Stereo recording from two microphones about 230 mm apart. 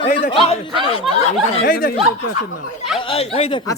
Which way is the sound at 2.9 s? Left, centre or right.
Left.